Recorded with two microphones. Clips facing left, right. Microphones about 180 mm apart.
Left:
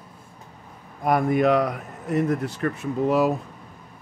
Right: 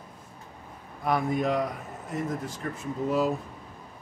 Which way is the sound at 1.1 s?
60° left (ahead or behind).